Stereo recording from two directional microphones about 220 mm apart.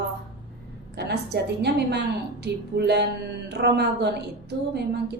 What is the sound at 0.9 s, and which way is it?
A woman's voice, 50° right (ahead or behind).